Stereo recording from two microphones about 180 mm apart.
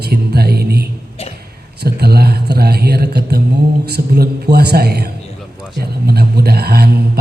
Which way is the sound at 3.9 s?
60° right (ahead or behind).